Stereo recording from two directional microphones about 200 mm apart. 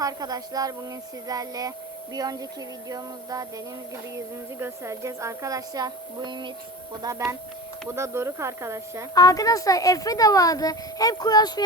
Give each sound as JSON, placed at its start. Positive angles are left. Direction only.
{"t": 0.0, "sound": "speech", "side_deg": -20}
{"t": 2.1, "sound": "a sound", "side_deg": -20}
{"t": 4.6, "sound": "speech", "side_deg": -15}
{"t": 7.9, "sound": "speech", "side_deg": -15}
{"t": 9.1, "sound": "speech", "side_deg": 15}